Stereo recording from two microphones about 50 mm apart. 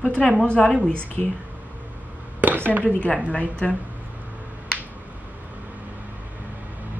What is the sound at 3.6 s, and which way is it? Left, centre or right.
Speech, left.